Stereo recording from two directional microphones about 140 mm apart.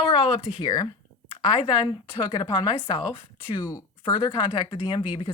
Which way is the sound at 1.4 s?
30° left (ahead or behind).